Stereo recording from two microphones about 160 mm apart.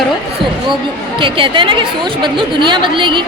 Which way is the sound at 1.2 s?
30° right (ahead or behind).